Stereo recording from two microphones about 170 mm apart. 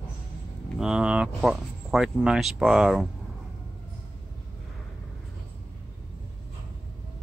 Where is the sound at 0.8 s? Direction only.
5° right (ahead or behind).